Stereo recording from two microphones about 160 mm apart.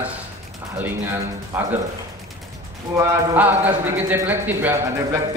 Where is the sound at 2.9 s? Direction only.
15° right (ahead or behind).